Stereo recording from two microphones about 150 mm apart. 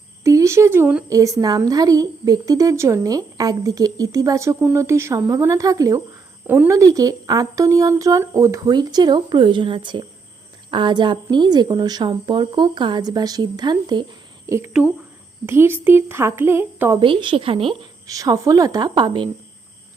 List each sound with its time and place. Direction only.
0.3 s a woman's voice: 20° right (ahead or behind)
15.4 s speech: 15° right (ahead or behind)
17.0 s a woman's voice: 35° right (ahead or behind)
18.1 s a woman's voice: 25° right (ahead or behind)